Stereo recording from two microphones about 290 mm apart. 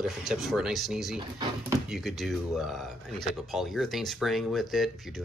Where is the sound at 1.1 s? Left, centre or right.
Centre.